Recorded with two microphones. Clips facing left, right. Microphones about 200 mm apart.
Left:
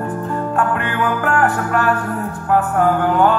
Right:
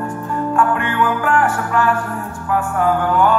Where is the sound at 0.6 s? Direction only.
40° left (ahead or behind).